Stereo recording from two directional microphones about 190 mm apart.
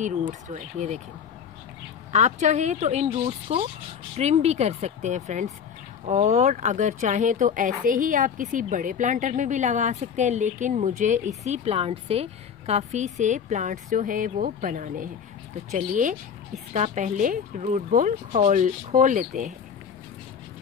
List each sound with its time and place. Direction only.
0.3 s speech: 40° right (ahead or behind)
2.1 s speech: 40° right (ahead or behind)